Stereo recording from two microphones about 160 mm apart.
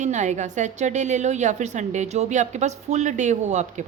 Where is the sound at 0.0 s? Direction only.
50° right (ahead or behind).